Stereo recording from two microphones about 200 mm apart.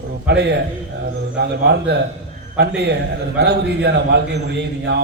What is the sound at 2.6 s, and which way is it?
A man's voice, 55° right (ahead or behind).